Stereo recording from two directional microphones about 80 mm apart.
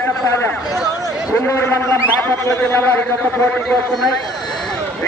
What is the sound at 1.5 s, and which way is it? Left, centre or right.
A man's voice, left.